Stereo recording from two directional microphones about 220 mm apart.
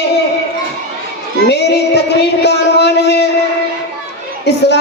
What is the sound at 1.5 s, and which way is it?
Female singing, 50° left (ahead or behind).